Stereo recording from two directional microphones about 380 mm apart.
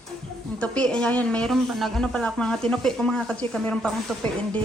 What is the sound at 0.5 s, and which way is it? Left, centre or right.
A woman's voice, centre.